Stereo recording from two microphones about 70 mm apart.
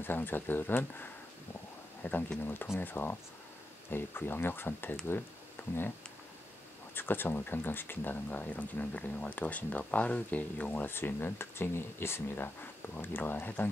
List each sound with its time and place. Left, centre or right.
0.0 s speech: left
5.6 s a sound: left
7.0 s speech: left